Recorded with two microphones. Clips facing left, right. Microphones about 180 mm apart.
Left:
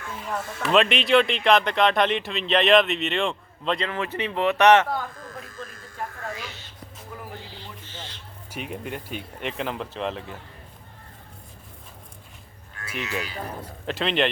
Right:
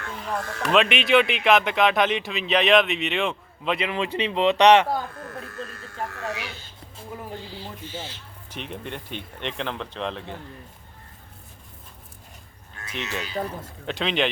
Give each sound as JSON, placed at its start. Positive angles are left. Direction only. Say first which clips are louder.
{"t": 0.3, "sound": "speech", "louder": "even", "side_deg": 0}
{"t": 5.1, "sound": "electric shaver", "louder": "right 3 dB", "side_deg": -65}
{"t": 7.9, "sound": "music", "louder": "right 6 dB", "side_deg": -10}
{"t": 8.4, "sound": "speech", "louder": "left 2 dB", "side_deg": 5}
{"t": 13.0, "sound": "speech", "louder": "left 1 dB", "side_deg": -25}
{"t": 13.8, "sound": "speech", "louder": "left 1 dB", "side_deg": 0}